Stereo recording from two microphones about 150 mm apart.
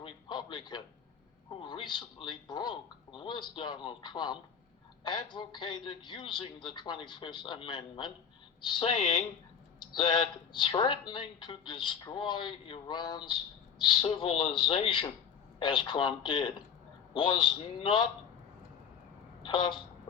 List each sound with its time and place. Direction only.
0.0 s a sound: 30° left (ahead or behind)
1.5 s a woman's voice: 35° left (ahead or behind)
19.5 s a woman's voice: 30° left (ahead or behind)